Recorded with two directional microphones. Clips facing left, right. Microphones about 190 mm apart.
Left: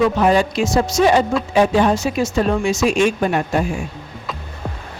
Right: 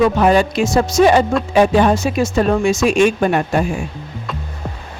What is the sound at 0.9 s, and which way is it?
Speech, 55° right (ahead or behind).